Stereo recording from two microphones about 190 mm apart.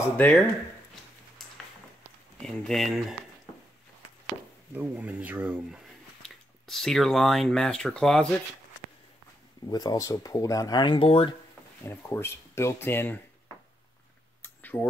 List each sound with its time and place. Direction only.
0.0 s speech: 10° left (ahead or behind)
2.4 s speech: centre (ahead or behind)
4.7 s speech: 10° right (ahead or behind)
6.2 s speech: centre (ahead or behind)
9.7 s speech: 20° left (ahead or behind)
11.8 s speech: 10° left (ahead or behind)
14.4 s a sound: 10° left (ahead or behind)